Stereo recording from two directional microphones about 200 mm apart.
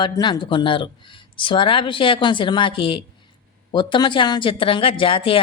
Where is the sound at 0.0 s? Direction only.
20° left (ahead or behind).